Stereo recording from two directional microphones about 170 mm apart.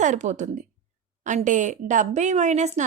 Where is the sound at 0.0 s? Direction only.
45° right (ahead or behind).